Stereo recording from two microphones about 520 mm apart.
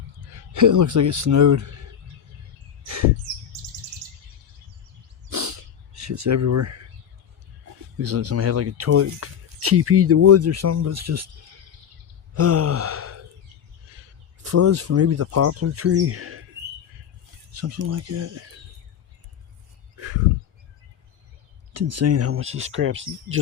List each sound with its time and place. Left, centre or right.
0.2 s speech: right
2.8 s bird: right
5.3 s a sound: right
7.9 s speech: right
12.3 s gasp: right
14.4 s speech: right
17.6 s speech: right
20.0 s a sound: right
21.7 s speech: right